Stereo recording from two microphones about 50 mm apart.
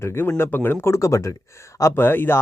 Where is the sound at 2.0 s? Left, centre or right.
Left.